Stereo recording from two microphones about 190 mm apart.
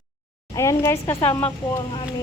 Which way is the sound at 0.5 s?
15° left (ahead or behind).